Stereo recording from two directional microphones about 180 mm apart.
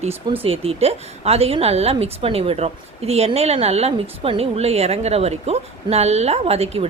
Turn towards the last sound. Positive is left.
turn(degrees=-35)  # may be behind; listen again after turning